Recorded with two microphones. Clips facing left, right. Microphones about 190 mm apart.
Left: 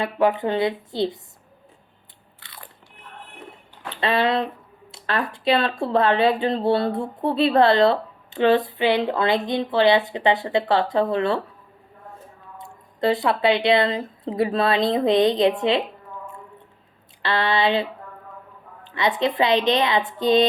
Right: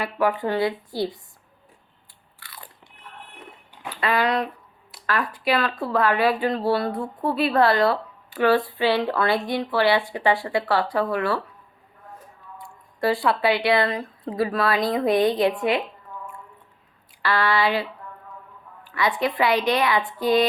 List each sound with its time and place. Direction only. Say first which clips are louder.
0.0 s speech: left 3 dB; 20° left (ahead or behind)
2.4 s biting: right 2 dB; 20° left (ahead or behind)
4.0 s speech: left 2 dB; 25° left (ahead or behind)
17.2 s speech: left 1 dB; 25° left (ahead or behind)
18.9 s speech: left 2 dB; 20° left (ahead or behind)